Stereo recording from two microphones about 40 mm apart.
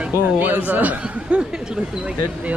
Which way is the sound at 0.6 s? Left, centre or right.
Right.